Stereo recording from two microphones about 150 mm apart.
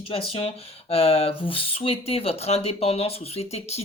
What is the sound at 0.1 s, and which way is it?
Speech, 40° left (ahead or behind).